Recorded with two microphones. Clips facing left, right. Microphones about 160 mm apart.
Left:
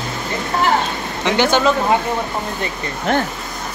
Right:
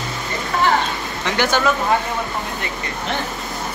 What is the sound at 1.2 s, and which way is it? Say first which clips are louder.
Speech: left 4 dB; 20° left (ahead or behind).